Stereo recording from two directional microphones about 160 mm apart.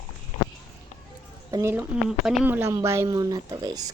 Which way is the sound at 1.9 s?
10° right (ahead or behind).